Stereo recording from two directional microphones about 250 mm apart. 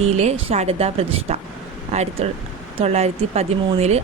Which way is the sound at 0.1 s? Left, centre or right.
Right.